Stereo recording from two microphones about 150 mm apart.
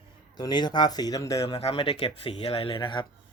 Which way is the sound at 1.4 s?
40° left (ahead or behind).